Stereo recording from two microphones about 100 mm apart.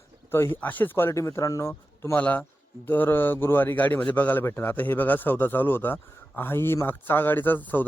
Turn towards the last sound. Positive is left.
turn(degrees=20)  # may be behind; listen again after turning